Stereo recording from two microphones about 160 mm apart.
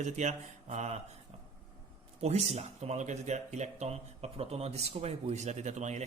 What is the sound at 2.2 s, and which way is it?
Speech, 40° right (ahead or behind).